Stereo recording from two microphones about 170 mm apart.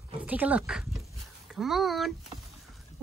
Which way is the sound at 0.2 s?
10° right (ahead or behind).